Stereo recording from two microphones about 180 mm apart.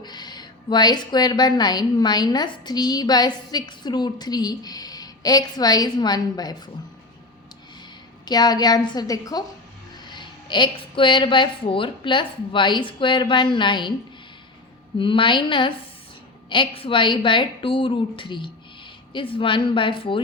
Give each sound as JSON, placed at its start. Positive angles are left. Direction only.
{"t": 0.0, "sound": "a woman's voice", "side_deg": 25}
{"t": 8.2, "sound": "a woman's voice", "side_deg": 20}
{"t": 14.9, "sound": "a woman's voice", "side_deg": 25}